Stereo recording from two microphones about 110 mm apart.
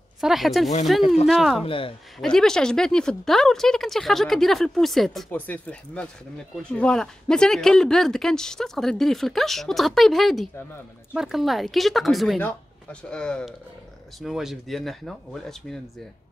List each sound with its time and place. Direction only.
0.2 s speech: centre (ahead or behind)
1.6 s speech: 55° left (ahead or behind)
2.1 s speech: 5° left (ahead or behind)
5.3 s speech: 15° left (ahead or behind)
14.2 s speech: 5° right (ahead or behind)